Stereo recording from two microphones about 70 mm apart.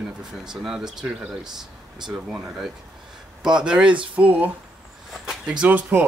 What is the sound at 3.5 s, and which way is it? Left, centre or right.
Speech, centre.